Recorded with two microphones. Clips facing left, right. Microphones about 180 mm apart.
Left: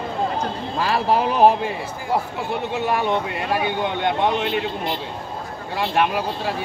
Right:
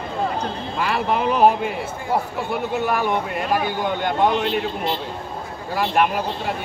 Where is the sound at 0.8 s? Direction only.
35° left (ahead or behind).